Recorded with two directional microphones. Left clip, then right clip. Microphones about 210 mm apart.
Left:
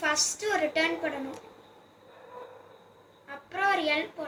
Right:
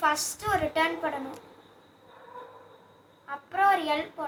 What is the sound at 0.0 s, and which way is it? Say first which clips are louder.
A woman's voice: right 1 dB; 20° right (ahead or behind).